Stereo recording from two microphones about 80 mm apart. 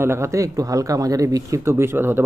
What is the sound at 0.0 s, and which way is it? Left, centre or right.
Speech, right.